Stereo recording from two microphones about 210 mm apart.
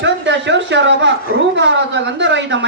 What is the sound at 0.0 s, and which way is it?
A woman's voice, 60° right (ahead or behind).